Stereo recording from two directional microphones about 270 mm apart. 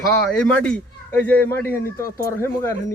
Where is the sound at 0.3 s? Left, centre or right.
Centre.